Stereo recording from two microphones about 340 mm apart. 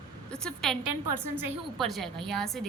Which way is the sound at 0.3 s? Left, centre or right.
Centre.